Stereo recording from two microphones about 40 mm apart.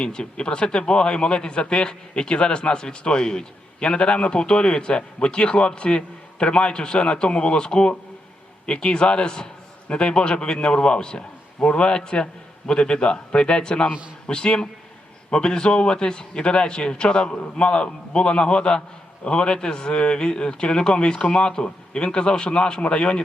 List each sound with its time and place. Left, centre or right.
0.0 s speech: left